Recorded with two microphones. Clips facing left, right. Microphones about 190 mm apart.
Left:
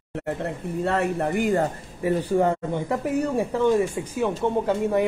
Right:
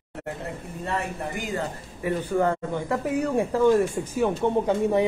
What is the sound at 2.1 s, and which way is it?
Speech, 40° left (ahead or behind).